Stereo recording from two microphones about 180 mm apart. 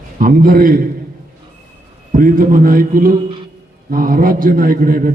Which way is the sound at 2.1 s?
50° right (ahead or behind).